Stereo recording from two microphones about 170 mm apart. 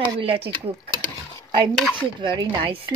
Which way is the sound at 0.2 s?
35° right (ahead or behind).